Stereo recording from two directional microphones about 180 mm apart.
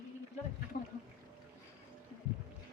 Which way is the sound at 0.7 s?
50° left (ahead or behind).